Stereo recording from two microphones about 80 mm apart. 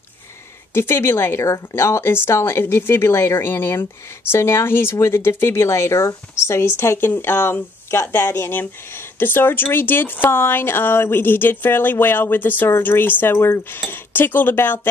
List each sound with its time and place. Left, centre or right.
0.7 s a woman's voice: left